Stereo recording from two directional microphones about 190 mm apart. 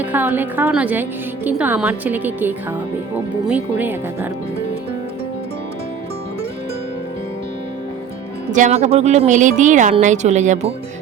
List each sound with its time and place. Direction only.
0.0 s a woman's voice: 10° right (ahead or behind)
8.5 s a woman's voice: 40° right (ahead or behind)